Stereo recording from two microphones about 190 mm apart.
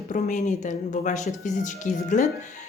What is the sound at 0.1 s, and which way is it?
A woman's voice, 40° left (ahead or behind).